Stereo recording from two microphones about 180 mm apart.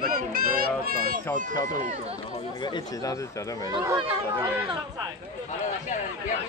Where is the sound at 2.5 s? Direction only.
25° left (ahead or behind).